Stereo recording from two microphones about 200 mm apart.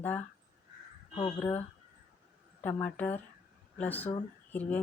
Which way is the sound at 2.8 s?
10° left (ahead or behind).